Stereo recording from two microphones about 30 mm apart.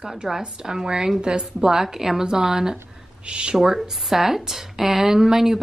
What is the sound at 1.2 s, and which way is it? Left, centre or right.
Speech, right.